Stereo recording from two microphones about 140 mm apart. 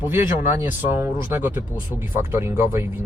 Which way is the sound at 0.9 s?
15° right (ahead or behind).